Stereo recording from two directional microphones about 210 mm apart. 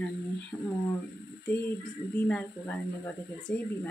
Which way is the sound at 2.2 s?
5° left (ahead or behind).